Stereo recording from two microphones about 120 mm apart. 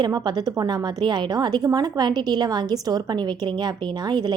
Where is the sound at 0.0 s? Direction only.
35° right (ahead or behind).